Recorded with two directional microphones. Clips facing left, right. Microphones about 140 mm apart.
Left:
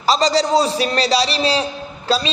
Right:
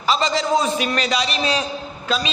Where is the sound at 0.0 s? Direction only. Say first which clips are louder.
Left 4 dB; 35° left (ahead or behind).